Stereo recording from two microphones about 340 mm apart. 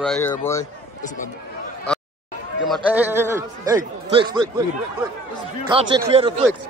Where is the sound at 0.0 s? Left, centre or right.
Centre.